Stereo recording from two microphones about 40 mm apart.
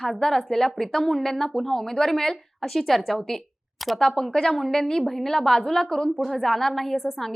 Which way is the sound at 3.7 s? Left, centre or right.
Centre.